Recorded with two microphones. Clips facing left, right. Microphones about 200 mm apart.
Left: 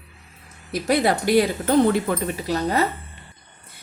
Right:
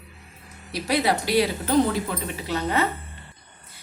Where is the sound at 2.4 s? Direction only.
40° left (ahead or behind).